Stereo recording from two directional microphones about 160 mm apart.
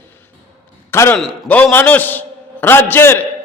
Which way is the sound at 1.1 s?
5° left (ahead or behind).